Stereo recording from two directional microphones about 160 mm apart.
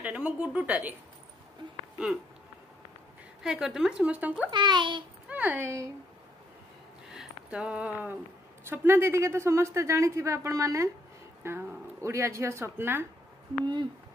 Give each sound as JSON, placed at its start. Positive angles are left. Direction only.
{"t": 0.0, "sound": "a woman's voice", "side_deg": -10}
{"t": 3.4, "sound": "a woman's voice", "side_deg": 0}
{"t": 4.5, "sound": "a child's voice", "side_deg": -30}
{"t": 5.3, "sound": "speech", "side_deg": -10}
{"t": 7.2, "sound": "a woman's voice", "side_deg": -5}